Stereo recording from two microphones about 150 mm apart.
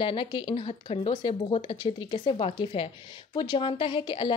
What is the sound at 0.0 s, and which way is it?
A woman's voice, 35° left (ahead or behind).